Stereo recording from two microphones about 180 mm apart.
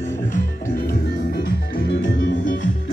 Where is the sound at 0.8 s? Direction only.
55° left (ahead or behind); by 2.4 s 75° left (ahead or behind).